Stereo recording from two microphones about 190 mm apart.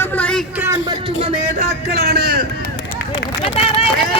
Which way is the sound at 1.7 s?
55° right (ahead or behind).